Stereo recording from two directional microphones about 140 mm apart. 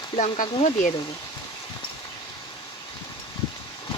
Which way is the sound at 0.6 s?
60° left (ahead or behind).